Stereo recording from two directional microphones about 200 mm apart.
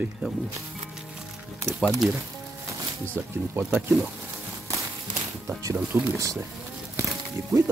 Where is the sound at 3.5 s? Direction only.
10° right (ahead or behind).